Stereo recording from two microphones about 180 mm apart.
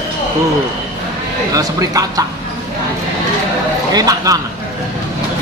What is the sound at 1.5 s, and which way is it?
Speech, 20° right (ahead or behind).